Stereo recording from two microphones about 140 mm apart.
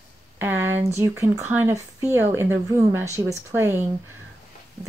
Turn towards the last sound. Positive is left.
turn(degrees=-15)  # may be behind; listen again after turning